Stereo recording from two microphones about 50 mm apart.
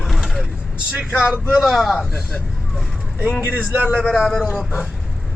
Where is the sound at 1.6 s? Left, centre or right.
Centre.